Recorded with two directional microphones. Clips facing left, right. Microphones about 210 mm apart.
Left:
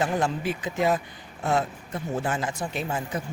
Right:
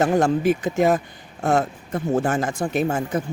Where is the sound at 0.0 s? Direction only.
45° right (ahead or behind).